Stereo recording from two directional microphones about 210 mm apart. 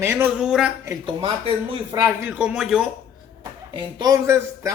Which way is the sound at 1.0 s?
25° right (ahead or behind).